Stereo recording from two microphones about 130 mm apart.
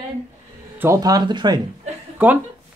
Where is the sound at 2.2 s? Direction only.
15° right (ahead or behind).